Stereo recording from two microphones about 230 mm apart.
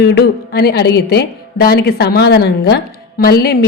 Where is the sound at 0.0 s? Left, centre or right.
Left.